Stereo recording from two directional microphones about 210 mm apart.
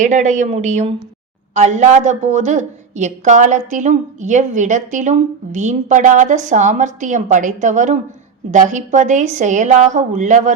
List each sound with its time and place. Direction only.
0.0 s a woman's voice: 35° right (ahead or behind)